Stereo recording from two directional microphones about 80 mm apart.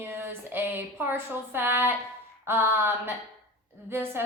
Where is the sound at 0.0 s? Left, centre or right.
Right.